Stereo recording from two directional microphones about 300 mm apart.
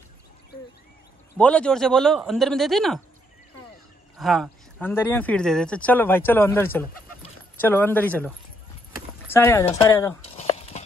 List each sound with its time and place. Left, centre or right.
1.4 s speech: centre
4.2 s speech: centre
9.3 s speech: centre
10.3 s a sound: left